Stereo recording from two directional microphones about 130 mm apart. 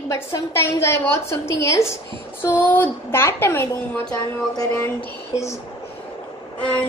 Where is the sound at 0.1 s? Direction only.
20° left (ahead or behind).